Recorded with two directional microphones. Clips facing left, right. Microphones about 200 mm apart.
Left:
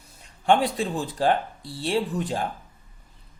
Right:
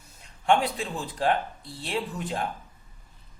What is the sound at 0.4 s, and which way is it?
A man's voice, 35° left (ahead or behind).